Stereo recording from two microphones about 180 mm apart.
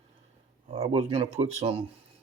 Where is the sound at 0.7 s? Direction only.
35° right (ahead or behind).